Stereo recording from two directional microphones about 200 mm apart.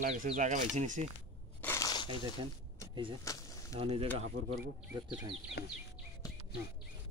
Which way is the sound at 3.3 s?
15° left (ahead or behind).